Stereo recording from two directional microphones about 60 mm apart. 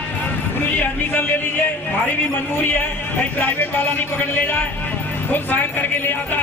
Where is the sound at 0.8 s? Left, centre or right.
Left.